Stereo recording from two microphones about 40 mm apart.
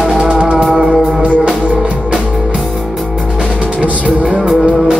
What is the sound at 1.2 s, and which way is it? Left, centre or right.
Music, right.